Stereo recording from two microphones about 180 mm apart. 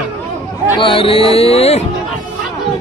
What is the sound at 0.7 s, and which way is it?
Speech, 30° left (ahead or behind).